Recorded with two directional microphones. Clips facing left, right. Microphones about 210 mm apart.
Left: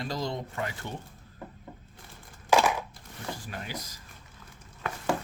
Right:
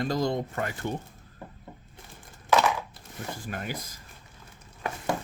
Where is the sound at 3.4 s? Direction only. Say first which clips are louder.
Right 4 dB; 50° right (ahead or behind).